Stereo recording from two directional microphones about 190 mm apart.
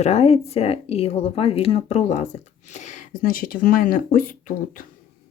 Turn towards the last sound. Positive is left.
turn(degrees=45)  # may be behind; listen again after turning